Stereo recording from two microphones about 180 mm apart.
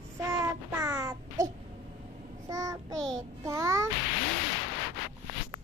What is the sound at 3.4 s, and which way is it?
Music, 15° right (ahead or behind).